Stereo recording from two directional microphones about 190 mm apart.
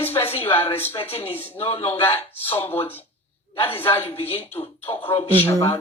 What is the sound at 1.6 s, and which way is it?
Speech, 30° left (ahead or behind).